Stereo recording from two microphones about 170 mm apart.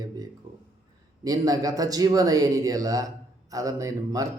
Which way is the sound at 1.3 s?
20° right (ahead or behind).